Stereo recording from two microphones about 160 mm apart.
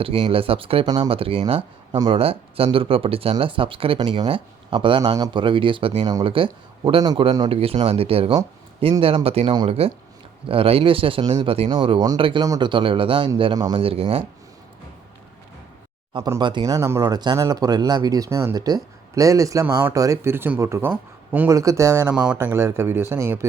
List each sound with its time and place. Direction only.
0.0 s speech: 35° right (ahead or behind)
16.2 s speech: 25° right (ahead or behind)
22.1 s speech: 5° right (ahead or behind)
22.4 s speech: 15° right (ahead or behind)